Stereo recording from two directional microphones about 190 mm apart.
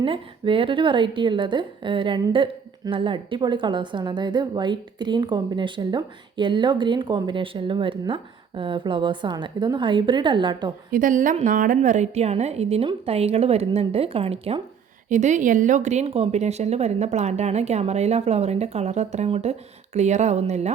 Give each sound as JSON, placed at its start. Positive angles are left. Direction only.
{"t": 0.0, "sound": "a woman's voice", "side_deg": -25}
{"t": 10.9, "sound": "speech", "side_deg": -45}